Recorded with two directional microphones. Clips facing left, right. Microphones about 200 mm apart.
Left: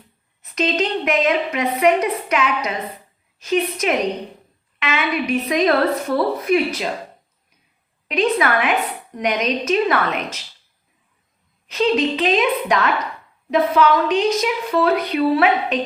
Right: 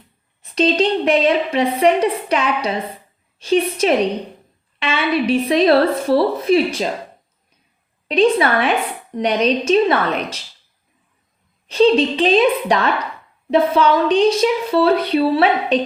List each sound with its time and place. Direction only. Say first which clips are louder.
0.5 s a woman's voice: right 5 dB; 30° right (ahead or behind)
8.0 s a woman's voice: right 4 dB; 30° right (ahead or behind)
11.7 s a woman's voice: right 5 dB; 30° right (ahead or behind)